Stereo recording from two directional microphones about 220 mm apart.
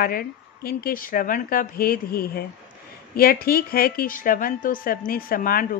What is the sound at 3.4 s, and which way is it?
A woman's voice, 40° left (ahead or behind).